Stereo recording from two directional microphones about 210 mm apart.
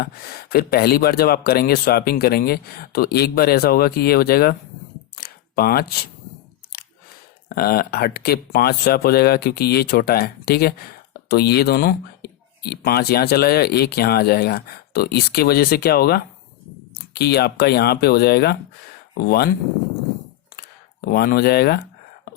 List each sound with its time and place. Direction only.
0.0 s speech: 45° left (ahead or behind)
5.1 s a sound: 45° left (ahead or behind)
7.5 s speech: 45° left (ahead or behind)
21.0 s speech: 50° left (ahead or behind)